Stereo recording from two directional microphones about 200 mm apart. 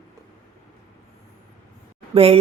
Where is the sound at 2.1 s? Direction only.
30° right (ahead or behind).